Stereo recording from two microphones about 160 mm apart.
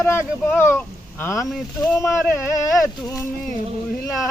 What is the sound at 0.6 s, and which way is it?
Speech, 15° left (ahead or behind).